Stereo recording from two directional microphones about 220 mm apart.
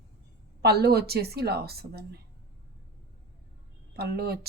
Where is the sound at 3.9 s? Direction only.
45° right (ahead or behind).